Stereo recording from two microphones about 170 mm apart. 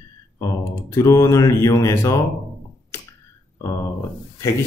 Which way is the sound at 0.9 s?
20° left (ahead or behind).